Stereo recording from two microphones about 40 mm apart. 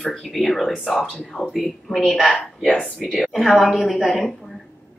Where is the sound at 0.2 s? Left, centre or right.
Centre.